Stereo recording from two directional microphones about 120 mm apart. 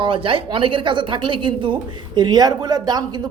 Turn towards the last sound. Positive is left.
turn(degrees=-35)  # may be behind; listen again after turning